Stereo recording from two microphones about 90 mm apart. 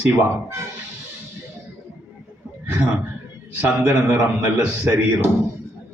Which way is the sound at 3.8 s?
30° right (ahead or behind).